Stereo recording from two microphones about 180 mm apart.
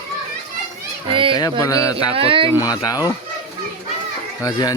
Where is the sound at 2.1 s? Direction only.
30° right (ahead or behind).